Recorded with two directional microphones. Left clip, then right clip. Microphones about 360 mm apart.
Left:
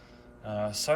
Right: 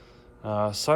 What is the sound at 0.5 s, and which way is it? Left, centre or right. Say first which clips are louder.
Speech: right 5 dB; right.